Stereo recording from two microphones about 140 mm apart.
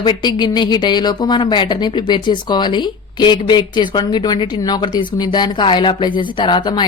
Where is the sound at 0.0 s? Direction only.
30° left (ahead or behind).